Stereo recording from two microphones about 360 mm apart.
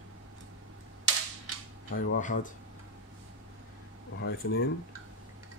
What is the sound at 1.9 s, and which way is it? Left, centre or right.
Speech, left.